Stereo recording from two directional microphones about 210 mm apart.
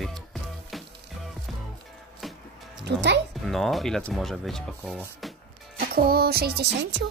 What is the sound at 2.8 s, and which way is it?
Music, 55° right (ahead or behind).